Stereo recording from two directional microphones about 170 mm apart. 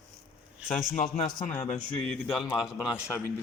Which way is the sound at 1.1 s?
45° left (ahead or behind).